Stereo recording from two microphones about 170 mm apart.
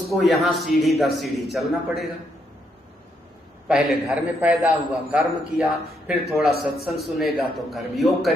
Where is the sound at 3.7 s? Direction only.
5° right (ahead or behind).